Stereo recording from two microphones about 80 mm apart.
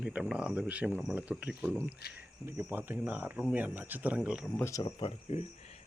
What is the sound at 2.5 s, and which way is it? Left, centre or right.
Speech, right.